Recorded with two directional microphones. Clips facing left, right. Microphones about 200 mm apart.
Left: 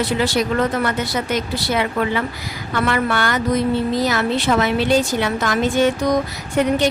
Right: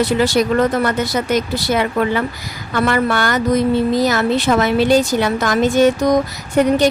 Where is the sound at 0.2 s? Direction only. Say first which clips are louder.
Right 4 dB; 45° right (ahead or behind).